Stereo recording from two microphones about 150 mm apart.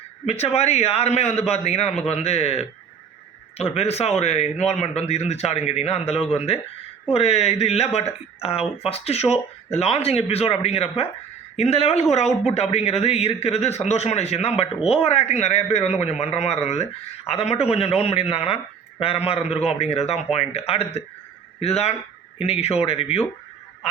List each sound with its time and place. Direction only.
0.3 s a man's voice: 45° left (ahead or behind)